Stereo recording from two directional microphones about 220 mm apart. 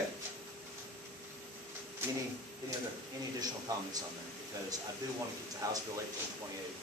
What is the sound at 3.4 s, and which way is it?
Speech, 15° right (ahead or behind).